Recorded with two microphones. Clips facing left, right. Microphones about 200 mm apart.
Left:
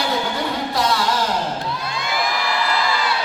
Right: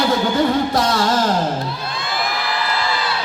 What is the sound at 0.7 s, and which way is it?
Music, 45° right (ahead or behind).